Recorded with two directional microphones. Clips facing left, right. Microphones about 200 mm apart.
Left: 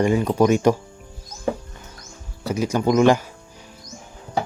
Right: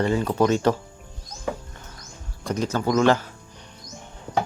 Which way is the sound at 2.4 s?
10° left (ahead or behind).